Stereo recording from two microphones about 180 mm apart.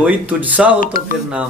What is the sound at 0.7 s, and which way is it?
Speech, 50° left (ahead or behind).